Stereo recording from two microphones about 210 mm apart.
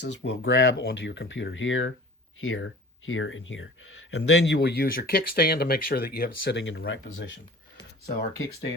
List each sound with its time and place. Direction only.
0.0 s speech: 55° left (ahead or behind)